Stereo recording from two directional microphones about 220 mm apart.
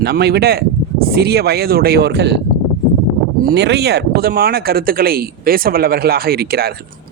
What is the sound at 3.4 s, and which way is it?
Speech, 50° right (ahead or behind).